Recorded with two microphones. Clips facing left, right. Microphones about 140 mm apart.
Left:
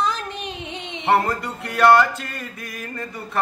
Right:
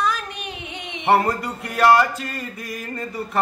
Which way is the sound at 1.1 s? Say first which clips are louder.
Right 1 dB; 5° right (ahead or behind).